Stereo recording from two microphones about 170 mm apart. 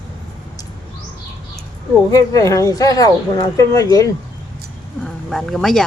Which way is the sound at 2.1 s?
20° left (ahead or behind).